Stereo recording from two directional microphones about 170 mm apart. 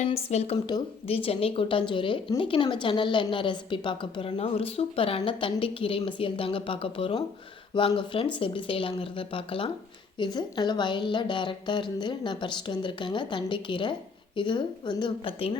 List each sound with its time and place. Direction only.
0.0 s a woman's voice: 40° left (ahead or behind)